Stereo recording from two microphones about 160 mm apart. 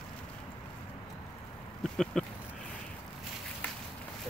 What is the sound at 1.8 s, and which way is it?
Speech, 5° left (ahead or behind).